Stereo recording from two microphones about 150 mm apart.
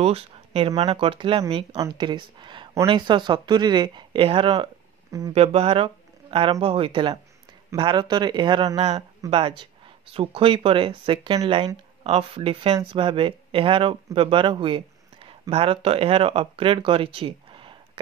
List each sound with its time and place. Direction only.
0.0 s speech: 40° right (ahead or behind)